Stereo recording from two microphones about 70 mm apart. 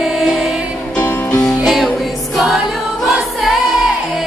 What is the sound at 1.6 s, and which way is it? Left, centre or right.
Music, centre.